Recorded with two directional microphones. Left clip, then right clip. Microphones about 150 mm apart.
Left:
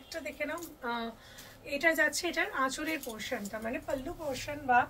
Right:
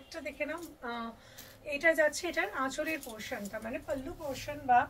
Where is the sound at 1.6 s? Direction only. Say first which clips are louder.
Right 1 dB; 25° left (ahead or behind).